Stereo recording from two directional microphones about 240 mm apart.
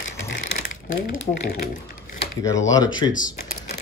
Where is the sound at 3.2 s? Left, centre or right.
Left.